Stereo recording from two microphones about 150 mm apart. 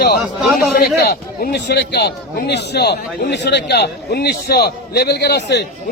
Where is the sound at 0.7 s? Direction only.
85° left.